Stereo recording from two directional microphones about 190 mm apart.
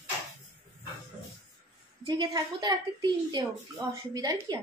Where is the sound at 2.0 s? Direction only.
20° right (ahead or behind).